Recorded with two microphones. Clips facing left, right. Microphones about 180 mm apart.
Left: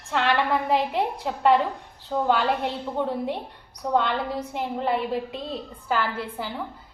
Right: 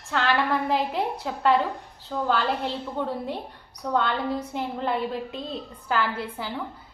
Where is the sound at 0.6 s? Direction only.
Centre (ahead or behind).